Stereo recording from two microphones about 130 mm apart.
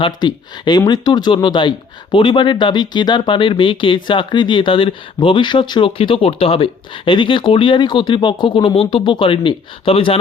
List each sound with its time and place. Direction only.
0.0 s speech: 35° left (ahead or behind)